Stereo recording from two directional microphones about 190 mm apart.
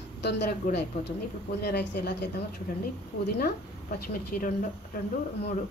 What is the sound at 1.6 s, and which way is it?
Speech, 60° left (ahead or behind).